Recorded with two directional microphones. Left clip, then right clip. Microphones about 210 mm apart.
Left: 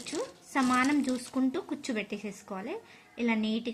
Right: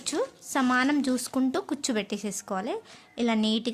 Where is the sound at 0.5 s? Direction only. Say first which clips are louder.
Right 2 dB; 55° right (ahead or behind).